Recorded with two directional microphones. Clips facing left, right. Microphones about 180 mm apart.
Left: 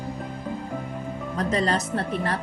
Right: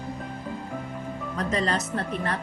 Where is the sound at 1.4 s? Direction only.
35° left (ahead or behind).